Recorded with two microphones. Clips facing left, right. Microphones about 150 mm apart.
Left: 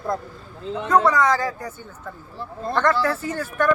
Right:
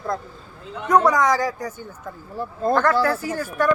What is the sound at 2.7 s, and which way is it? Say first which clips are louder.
Speech: right 1 dB; 10° right (ahead or behind).